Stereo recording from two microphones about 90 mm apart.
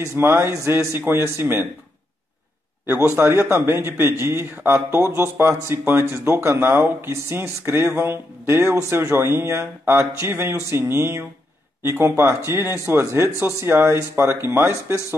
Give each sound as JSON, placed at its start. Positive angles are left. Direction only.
{"t": 0.0, "sound": "speech", "side_deg": -25}
{"t": 2.9, "sound": "speech", "side_deg": -30}